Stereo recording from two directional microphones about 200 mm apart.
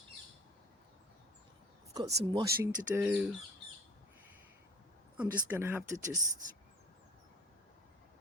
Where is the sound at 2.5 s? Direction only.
45° right (ahead or behind).